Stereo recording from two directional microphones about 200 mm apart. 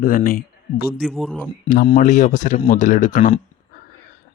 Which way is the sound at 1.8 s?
40° left (ahead or behind).